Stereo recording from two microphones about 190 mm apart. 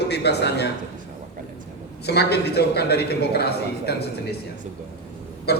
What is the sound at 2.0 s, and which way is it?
A man's voice, 60° left (ahead or behind).